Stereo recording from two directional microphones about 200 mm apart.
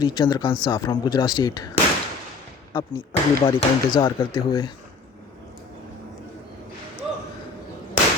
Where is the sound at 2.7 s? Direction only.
10° left (ahead or behind).